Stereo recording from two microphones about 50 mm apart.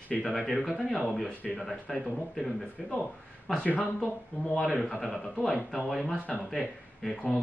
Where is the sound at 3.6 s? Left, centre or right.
Left.